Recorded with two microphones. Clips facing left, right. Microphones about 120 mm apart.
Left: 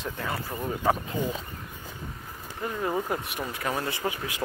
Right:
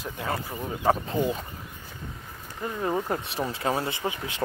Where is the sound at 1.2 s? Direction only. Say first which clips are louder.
Right 4 dB; 15° right (ahead or behind).